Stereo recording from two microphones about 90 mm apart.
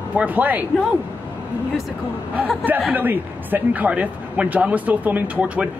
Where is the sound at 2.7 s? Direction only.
20° right (ahead or behind).